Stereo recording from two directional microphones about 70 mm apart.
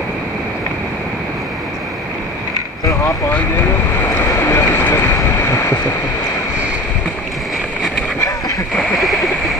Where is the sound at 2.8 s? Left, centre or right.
Left.